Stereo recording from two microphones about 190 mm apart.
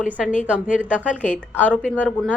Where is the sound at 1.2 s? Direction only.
5° left (ahead or behind).